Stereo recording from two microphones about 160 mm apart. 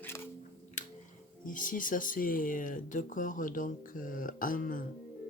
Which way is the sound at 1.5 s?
55° left (ahead or behind).